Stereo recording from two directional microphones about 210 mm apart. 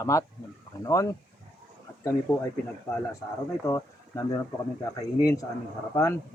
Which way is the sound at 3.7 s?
15° left (ahead or behind).